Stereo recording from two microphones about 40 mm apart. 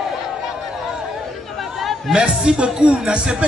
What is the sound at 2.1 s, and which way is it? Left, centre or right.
A man's voice, right.